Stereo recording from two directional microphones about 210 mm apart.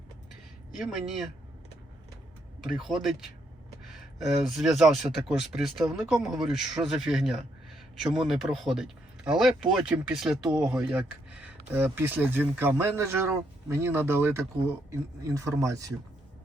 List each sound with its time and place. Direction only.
0.8 s speech: centre (ahead or behind)
2.6 s speech: centre (ahead or behind)
4.4 s speech: centre (ahead or behind); by 15.9 s 15° right (ahead or behind)